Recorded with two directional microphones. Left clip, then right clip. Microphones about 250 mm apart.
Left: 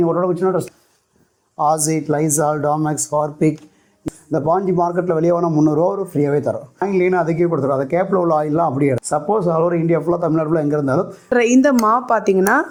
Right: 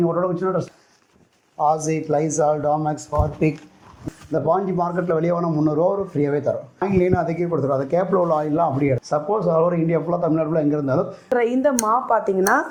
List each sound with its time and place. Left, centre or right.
0.0 s a man's voice: left
6.7 s a man's voice: left